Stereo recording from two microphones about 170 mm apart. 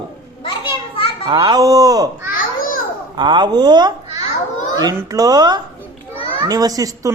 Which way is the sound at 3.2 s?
25° right (ahead or behind).